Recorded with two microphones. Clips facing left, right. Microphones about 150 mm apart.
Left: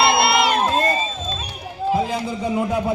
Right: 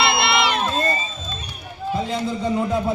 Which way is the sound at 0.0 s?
40° left (ahead or behind).